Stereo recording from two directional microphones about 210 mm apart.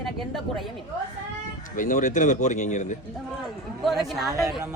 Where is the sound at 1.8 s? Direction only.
35° left (ahead or behind).